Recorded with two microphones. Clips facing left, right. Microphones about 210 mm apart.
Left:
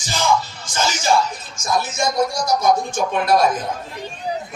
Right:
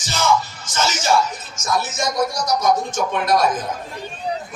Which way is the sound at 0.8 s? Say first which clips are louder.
Even; 15° left (ahead or behind).